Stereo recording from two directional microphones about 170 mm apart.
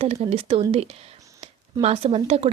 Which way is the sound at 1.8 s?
35° right (ahead or behind).